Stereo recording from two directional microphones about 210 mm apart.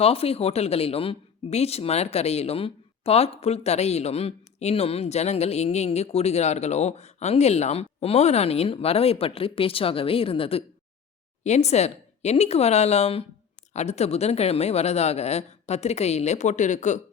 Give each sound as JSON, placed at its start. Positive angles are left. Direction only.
{"t": 0.0, "sound": "a woman's voice", "side_deg": 30}